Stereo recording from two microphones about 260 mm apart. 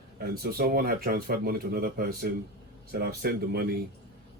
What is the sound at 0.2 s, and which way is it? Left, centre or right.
Speech, right.